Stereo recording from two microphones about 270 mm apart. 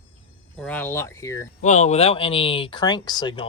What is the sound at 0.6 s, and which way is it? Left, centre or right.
Speech, centre.